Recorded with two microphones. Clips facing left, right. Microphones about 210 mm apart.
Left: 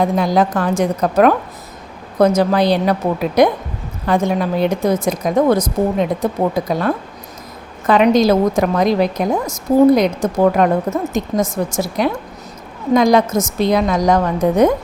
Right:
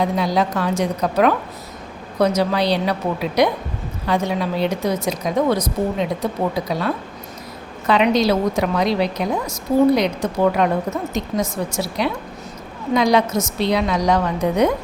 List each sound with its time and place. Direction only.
0.0 s a woman's voice: 50° left (ahead or behind)